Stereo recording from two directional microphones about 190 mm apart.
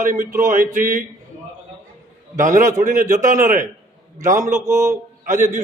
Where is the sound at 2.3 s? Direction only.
40° right (ahead or behind).